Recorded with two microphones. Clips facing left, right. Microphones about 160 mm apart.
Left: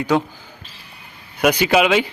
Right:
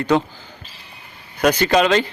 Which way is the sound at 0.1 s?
10° left (ahead or behind).